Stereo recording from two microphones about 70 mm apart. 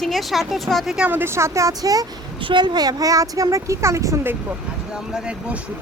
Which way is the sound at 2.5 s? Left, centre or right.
Right.